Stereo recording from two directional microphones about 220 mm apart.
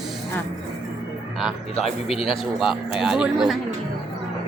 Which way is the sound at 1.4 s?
Centre (ahead or behind).